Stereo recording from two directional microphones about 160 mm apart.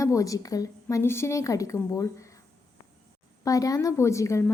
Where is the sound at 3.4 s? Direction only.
20° left (ahead or behind).